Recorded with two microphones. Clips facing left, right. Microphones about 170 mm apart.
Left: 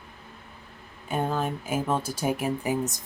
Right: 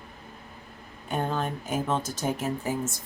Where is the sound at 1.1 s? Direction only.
5° left (ahead or behind).